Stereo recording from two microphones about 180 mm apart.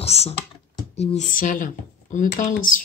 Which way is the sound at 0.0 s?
35° left (ahead or behind).